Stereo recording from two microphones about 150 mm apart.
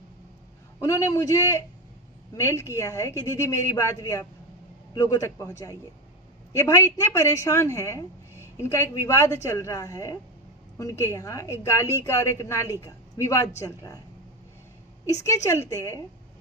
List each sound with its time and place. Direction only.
0.8 s a woman's voice: 20° left (ahead or behind)
15.7 s a woman's voice: 20° left (ahead or behind)